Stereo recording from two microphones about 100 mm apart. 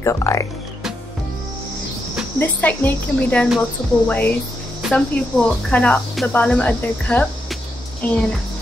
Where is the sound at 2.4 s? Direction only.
20° left (ahead or behind).